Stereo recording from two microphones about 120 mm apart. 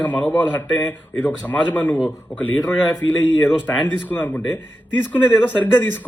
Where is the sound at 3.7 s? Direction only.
15° left (ahead or behind).